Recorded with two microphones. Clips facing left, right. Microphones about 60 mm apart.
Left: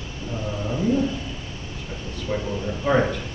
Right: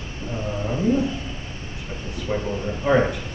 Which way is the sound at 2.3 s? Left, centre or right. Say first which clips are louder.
Right 1 dB; centre.